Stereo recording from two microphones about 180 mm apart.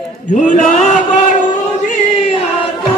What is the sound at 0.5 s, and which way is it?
Chant, 45° left (ahead or behind).